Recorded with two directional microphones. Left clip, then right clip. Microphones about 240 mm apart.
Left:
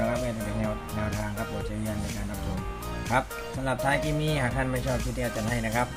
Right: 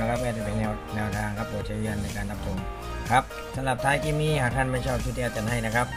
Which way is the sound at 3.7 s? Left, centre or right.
Centre.